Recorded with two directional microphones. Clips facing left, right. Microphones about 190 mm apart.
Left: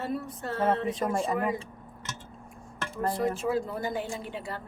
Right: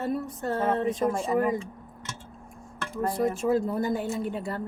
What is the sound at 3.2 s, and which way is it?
Speech, 45° right (ahead or behind).